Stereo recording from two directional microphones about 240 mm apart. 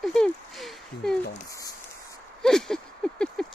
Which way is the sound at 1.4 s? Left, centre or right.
Centre.